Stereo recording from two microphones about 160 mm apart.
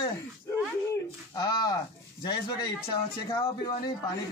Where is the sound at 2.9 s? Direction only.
25° left (ahead or behind).